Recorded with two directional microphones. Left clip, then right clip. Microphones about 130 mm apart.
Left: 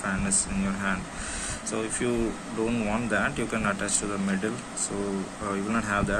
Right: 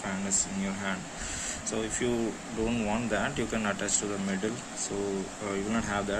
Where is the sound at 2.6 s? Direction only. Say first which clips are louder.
Left 2 dB; 30° right (ahead or behind).